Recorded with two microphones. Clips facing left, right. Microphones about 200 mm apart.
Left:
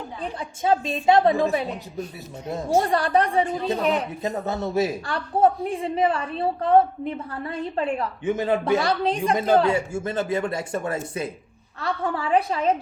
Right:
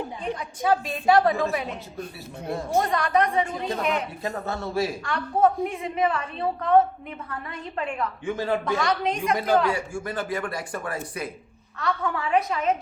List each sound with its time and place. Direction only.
0.2 s speech: 25° left (ahead or behind)
2.9 s a woman's voice: 30° left (ahead or behind)
4.2 s speech: 20° left (ahead or behind)
5.0 s a woman's voice: 30° left (ahead or behind)
8.2 s speech: 20° left (ahead or behind)
8.8 s a woman's voice: 30° left (ahead or behind)